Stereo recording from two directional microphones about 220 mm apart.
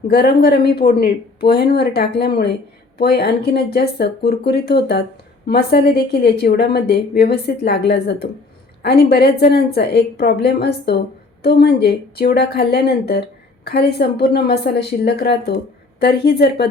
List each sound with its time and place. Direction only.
0.1 s a woman's voice: 45° left (ahead or behind)